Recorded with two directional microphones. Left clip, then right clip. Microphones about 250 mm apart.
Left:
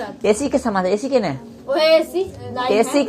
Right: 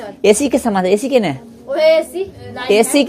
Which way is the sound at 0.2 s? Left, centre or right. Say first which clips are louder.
Right 6 dB; right.